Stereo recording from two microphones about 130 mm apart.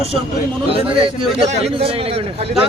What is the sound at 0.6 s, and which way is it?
A man's voice, 45° right (ahead or behind).